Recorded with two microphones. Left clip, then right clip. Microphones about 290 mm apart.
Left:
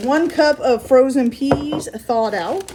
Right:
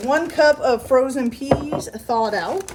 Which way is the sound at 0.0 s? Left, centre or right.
Right.